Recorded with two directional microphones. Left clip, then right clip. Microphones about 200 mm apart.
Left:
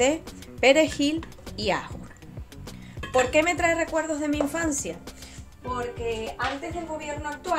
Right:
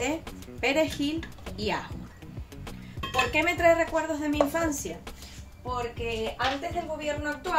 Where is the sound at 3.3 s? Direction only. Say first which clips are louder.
Even; 55° left (ahead or behind).